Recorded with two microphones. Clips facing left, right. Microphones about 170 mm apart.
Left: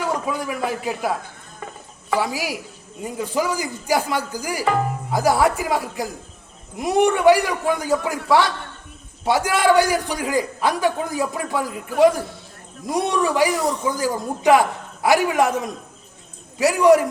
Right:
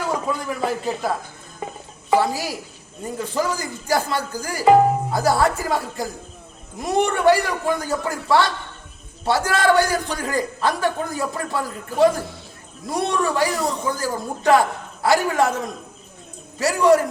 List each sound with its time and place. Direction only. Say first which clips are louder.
0.3 s a man's voice: even; 10° left (ahead or behind)
2.1 s a man's voice: right 3 dB; 15° left (ahead or behind)